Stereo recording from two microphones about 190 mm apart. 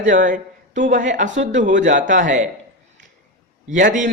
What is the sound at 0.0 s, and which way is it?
Speech, 40° right (ahead or behind).